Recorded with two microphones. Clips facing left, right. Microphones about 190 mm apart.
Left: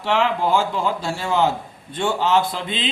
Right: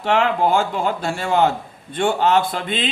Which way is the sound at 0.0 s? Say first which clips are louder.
Right 2 dB; 55° right (ahead or behind).